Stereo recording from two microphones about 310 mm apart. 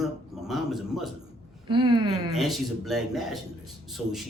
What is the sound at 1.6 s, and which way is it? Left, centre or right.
Speech, centre.